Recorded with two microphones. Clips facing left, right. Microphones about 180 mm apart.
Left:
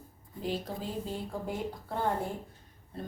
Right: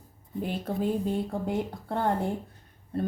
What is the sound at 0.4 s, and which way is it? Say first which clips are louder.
Speech: right 5 dB; 55° right (ahead or behind).